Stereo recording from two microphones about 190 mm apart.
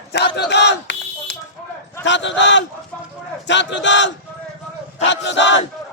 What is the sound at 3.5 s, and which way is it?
Speech, 70° left (ahead or behind).